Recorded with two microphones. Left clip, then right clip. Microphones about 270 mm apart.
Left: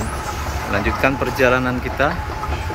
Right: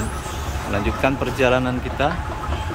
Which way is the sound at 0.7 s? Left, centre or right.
Centre.